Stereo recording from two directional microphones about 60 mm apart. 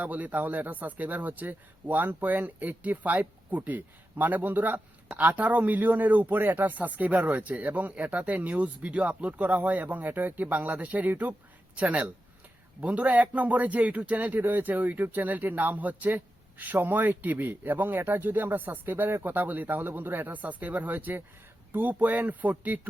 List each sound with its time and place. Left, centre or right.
0.0 s speech: right